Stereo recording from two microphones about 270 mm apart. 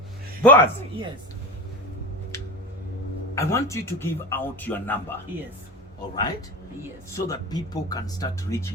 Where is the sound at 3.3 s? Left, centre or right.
Centre.